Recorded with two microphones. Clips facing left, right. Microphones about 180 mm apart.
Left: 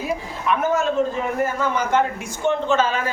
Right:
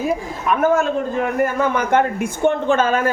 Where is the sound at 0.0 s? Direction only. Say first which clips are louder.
Right 4 dB; 50° right (ahead or behind).